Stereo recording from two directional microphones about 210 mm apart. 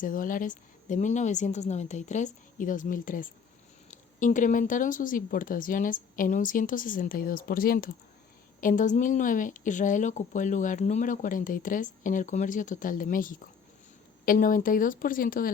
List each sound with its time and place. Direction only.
0.0 s a woman's voice: 40° left (ahead or behind)